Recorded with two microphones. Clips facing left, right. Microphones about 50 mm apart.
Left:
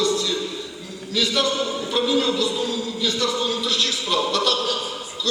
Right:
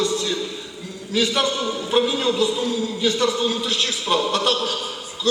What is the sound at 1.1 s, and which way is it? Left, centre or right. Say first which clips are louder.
A man's voice: right 1 dB; right.